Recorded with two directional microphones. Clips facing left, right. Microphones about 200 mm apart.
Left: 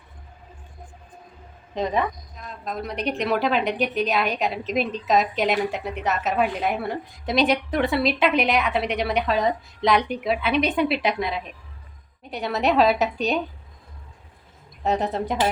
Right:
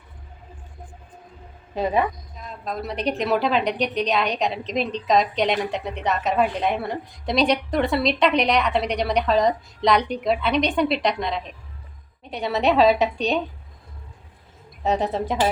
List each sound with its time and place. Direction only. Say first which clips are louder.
1.7 s a woman's voice: right 2 dB; 10° right (ahead or behind)
14.8 s a woman's voice: right 1 dB; centre (ahead or behind)